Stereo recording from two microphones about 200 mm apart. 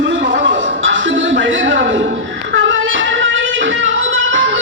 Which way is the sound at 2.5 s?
70° right (ahead or behind).